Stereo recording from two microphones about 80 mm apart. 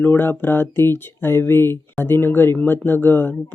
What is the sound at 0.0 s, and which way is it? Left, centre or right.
Speech, left.